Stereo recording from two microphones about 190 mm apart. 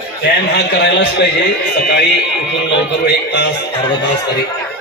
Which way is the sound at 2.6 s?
65° left (ahead or behind).